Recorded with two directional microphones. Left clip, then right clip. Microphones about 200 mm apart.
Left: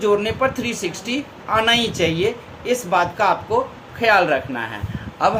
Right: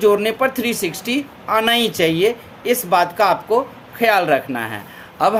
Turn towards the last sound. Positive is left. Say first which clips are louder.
# right 2 dB
turn(degrees=-55)  # may be behind; listen again after turning